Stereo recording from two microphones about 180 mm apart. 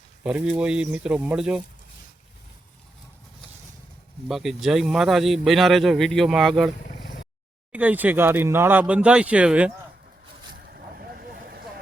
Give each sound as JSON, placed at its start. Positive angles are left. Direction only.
{"t": 0.2, "sound": "speech", "side_deg": -5}
{"t": 4.3, "sound": "speech", "side_deg": 0}
{"t": 7.7, "sound": "speech", "side_deg": -10}
{"t": 10.5, "sound": "vehicle", "side_deg": -60}